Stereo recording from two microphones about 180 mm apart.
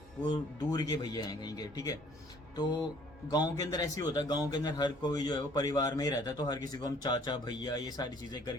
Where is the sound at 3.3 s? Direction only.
20° left (ahead or behind).